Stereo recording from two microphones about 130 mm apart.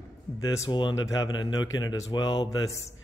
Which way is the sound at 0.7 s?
35° left (ahead or behind).